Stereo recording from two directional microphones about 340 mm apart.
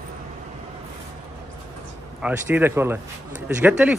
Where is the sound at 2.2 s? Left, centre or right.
Centre.